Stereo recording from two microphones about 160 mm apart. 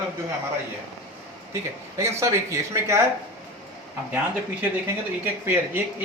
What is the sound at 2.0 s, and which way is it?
Speech, 20° right (ahead or behind).